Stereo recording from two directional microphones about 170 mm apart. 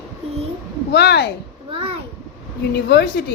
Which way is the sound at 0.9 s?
75° left (ahead or behind).